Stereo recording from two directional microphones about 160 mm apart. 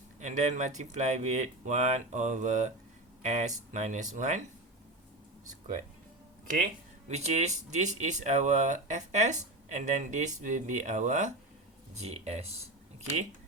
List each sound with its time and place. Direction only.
0.2 s speech: 50° right (ahead or behind)
7.1 s speech: 45° right (ahead or behind)